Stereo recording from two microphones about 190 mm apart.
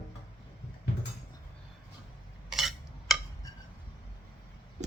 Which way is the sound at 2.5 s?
Centre (ahead or behind).